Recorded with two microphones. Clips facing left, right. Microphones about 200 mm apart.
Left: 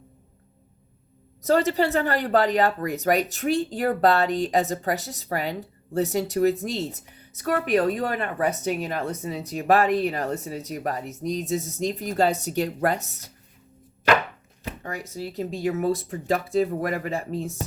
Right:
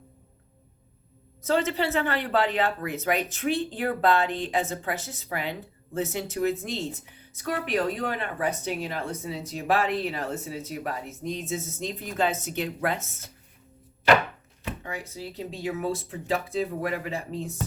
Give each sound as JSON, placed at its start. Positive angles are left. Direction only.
{"t": 1.5, "sound": "speech", "side_deg": 40}
{"t": 14.8, "sound": "speech", "side_deg": 40}